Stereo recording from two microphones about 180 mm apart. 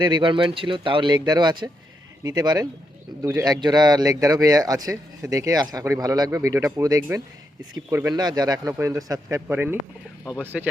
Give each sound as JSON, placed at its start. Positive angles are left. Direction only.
{"t": 0.0, "sound": "speech", "side_deg": -25}